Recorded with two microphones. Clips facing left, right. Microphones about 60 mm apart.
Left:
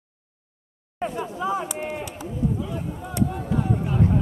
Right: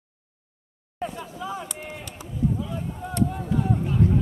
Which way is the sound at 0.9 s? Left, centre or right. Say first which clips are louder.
Left 4 dB; left.